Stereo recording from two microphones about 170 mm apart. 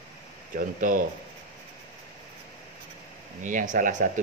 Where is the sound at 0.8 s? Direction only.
50° right (ahead or behind).